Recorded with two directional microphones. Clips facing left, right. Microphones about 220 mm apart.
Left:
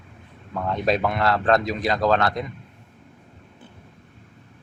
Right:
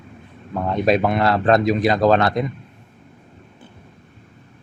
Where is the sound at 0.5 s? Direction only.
15° right (ahead or behind).